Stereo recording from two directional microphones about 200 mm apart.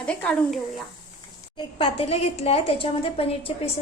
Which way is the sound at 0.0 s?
5° left (ahead or behind).